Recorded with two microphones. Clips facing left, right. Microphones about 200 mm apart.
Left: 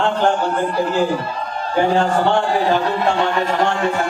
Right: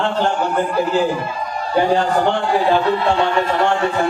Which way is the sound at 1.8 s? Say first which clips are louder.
Even; 55° left (ahead or behind).